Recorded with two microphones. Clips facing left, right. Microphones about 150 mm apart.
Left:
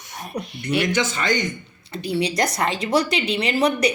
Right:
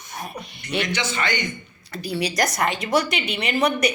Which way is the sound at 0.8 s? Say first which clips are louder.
Left 4 dB; 45° left (ahead or behind).